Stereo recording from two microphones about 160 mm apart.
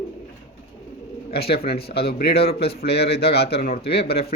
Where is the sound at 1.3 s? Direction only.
80° left.